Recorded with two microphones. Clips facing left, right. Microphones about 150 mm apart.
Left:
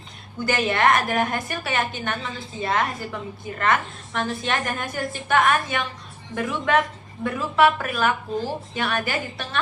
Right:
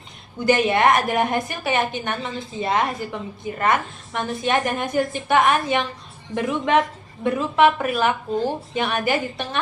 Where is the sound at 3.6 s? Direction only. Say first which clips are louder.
Right 1 dB; 15° right (ahead or behind).